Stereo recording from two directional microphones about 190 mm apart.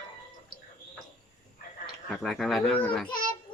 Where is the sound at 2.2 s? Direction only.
Centre (ahead or behind).